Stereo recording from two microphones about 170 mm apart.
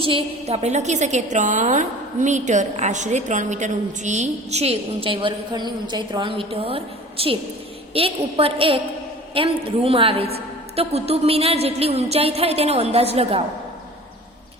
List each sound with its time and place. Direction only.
0.0 s a woman's voice: 35° right (ahead or behind)